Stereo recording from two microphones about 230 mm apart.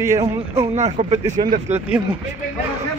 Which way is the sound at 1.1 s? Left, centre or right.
Centre.